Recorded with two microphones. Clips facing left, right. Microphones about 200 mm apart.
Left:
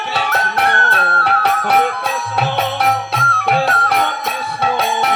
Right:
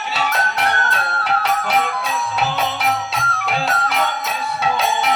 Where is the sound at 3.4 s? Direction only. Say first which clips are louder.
Left 6 dB; 60° left (ahead or behind).